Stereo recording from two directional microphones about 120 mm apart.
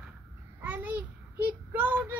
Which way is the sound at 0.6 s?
15° right (ahead or behind).